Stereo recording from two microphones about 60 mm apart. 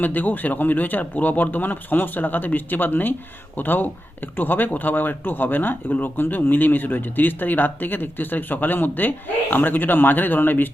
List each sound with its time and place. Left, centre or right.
0.0 s speech: left